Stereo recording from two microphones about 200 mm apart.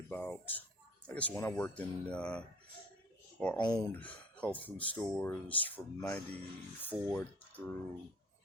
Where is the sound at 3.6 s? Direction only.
20° left (ahead or behind).